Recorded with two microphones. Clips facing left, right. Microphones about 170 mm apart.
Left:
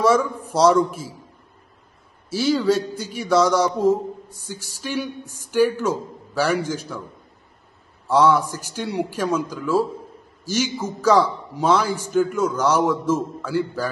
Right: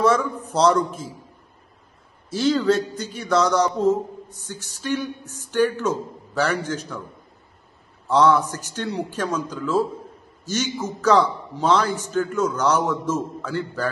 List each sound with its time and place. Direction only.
0.0 s a man's voice: 10° left (ahead or behind)
2.2 s a man's voice: 10° left (ahead or behind)
8.1 s a man's voice: 10° left (ahead or behind)